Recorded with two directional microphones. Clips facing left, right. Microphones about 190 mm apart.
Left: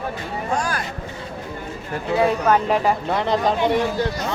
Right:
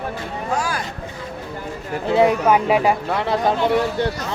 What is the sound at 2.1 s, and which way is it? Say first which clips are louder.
Speech: right 3 dB; 20° right (ahead or behind).